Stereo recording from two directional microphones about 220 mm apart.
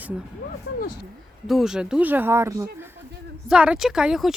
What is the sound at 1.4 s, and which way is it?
Speech, centre (ahead or behind).